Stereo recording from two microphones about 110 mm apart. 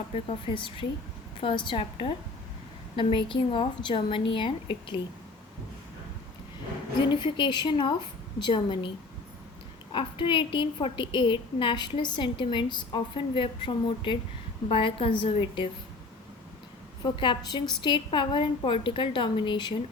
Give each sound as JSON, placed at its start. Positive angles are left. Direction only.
{"t": 0.1, "sound": "a woman's voice", "side_deg": 60}
{"t": 7.1, "sound": "a woman's voice", "side_deg": 45}
{"t": 9.9, "sound": "a woman's voice", "side_deg": 50}
{"t": 17.0, "sound": "a woman's voice", "side_deg": 40}